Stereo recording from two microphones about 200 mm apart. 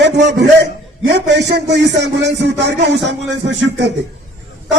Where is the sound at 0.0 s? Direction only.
60° right (ahead or behind).